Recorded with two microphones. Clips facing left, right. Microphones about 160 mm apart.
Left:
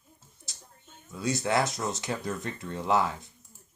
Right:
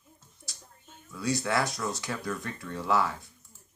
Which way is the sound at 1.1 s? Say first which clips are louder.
Left 1 dB; 20° left (ahead or behind).